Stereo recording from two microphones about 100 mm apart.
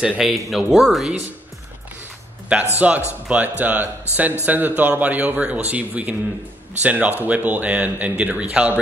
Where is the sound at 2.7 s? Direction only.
15° right (ahead or behind).